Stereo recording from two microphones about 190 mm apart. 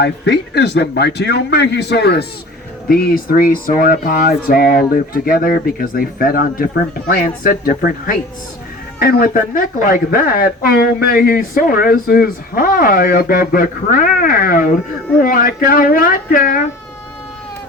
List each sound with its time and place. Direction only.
0.0 s speech: 65° left (ahead or behind); by 16.6 s 45° left (ahead or behind)